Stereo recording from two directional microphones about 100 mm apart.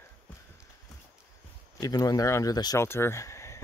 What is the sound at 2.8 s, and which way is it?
Speech, 25° left (ahead or behind).